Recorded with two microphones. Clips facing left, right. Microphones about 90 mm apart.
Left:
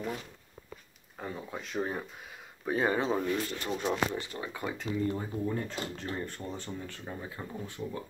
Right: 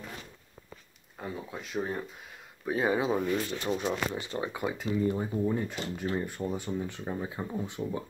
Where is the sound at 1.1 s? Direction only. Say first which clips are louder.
Right 1 dB; centre (ahead or behind).